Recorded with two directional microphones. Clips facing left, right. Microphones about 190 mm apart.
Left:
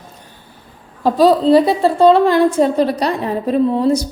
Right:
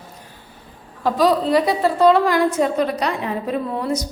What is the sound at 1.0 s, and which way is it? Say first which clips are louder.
A woman's voice: left 6 dB; 30° left (ahead or behind).